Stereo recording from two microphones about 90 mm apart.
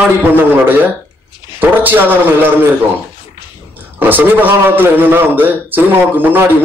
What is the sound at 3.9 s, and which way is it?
A man's voice, 20° right (ahead or behind).